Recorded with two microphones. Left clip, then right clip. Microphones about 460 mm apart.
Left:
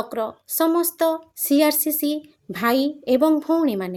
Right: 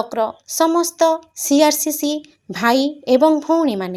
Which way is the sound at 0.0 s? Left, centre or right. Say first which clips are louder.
Right 6 dB; left.